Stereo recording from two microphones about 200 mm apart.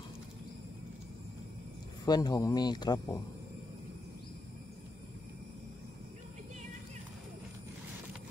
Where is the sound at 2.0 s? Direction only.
20° left (ahead or behind).